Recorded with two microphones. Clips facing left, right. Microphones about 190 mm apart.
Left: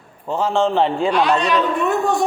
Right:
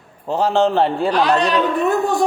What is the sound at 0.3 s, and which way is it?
A woman's voice, 35° right (ahead or behind).